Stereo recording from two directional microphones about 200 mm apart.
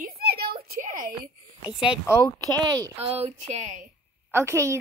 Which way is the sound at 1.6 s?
5° right (ahead or behind).